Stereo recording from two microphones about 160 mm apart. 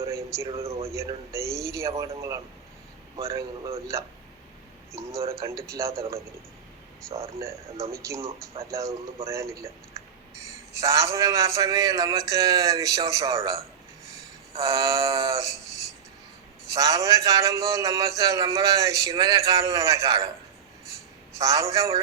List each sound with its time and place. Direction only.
0.4 s speech: 40° right (ahead or behind)
0.9 s a man's voice: 20° right (ahead or behind)
3.2 s a man's voice: 20° right (ahead or behind)
10.0 s a sound: 20° right (ahead or behind)
10.4 s a man's voice: 20° right (ahead or behind)
14.6 s a man's voice: 20° right (ahead or behind)
16.7 s a man's voice: 20° right (ahead or behind)
21.3 s a man's voice: 20° right (ahead or behind)